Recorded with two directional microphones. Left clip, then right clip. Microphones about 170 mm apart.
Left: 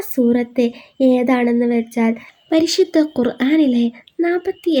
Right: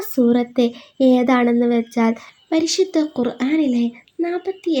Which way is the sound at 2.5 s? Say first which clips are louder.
Left 3 dB; 25° left (ahead or behind).